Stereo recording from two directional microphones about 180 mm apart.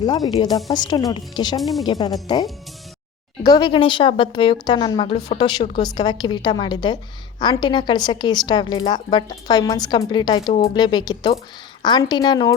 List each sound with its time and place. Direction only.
0.0 s a woman's voice: 25° left (ahead or behind)